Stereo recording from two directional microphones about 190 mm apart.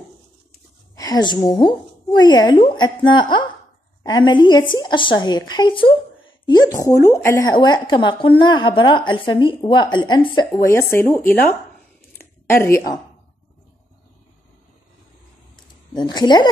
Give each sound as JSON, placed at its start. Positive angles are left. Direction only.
{"t": 0.9, "sound": "a woman's voice", "side_deg": 20}
{"t": 10.7, "sound": "speech", "side_deg": 15}
{"t": 12.2, "sound": "a sound", "side_deg": 10}
{"t": 15.9, "sound": "a woman's voice", "side_deg": 20}